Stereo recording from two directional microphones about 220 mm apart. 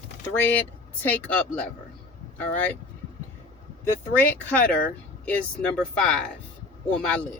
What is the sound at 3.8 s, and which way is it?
Speech, 10° left (ahead or behind).